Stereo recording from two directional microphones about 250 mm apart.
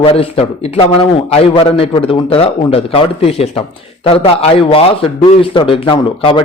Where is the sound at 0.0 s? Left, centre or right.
Left.